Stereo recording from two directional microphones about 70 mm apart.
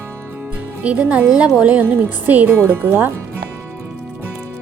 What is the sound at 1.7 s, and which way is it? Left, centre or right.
Speech, right.